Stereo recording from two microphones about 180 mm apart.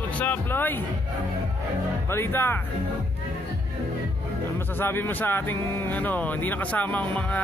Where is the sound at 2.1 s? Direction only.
15° left (ahead or behind).